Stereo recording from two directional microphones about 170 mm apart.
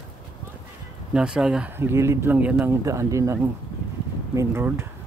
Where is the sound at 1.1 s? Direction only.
5° right (ahead or behind).